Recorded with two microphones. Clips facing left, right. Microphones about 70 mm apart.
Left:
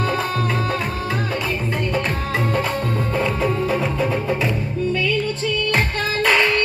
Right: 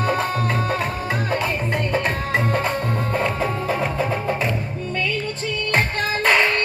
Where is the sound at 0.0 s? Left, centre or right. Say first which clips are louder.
Right 1 dB; right.